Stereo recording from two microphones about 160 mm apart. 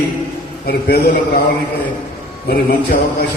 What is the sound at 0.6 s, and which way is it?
Speech, 75° left (ahead or behind).